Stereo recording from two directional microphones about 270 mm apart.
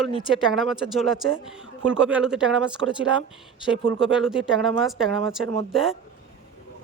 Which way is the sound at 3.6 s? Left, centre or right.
Centre.